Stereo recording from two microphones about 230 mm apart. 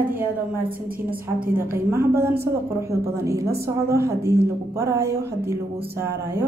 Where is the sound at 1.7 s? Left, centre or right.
Centre.